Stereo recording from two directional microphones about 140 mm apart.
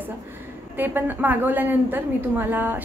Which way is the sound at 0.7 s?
15° right (ahead or behind).